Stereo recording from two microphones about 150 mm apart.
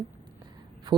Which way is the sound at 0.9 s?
30° right (ahead or behind).